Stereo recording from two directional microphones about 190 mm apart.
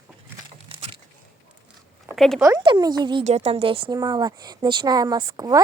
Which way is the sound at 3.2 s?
35° right (ahead or behind).